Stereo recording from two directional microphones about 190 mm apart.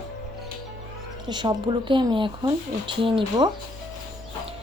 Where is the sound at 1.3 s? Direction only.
25° right (ahead or behind).